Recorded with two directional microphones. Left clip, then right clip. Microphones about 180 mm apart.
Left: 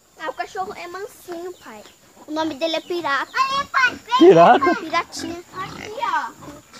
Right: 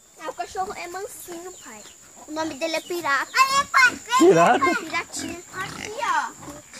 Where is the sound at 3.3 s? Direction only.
20° right (ahead or behind).